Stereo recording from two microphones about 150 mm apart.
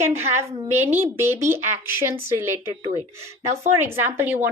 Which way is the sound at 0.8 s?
15° right (ahead or behind).